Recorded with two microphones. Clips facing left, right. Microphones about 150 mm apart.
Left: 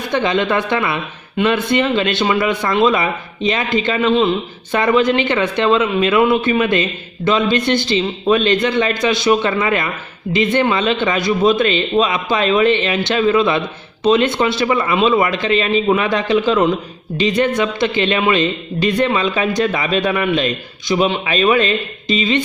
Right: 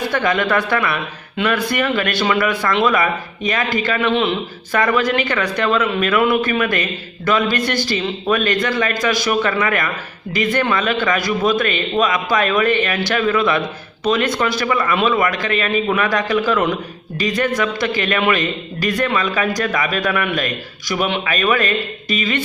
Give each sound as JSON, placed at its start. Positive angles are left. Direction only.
{"t": 0.1, "sound": "a man's voice", "side_deg": 20}